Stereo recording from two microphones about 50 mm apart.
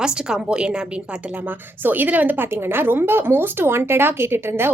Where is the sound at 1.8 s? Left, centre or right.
Right.